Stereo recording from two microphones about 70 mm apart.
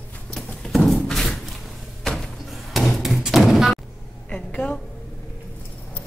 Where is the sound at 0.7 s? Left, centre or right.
Centre.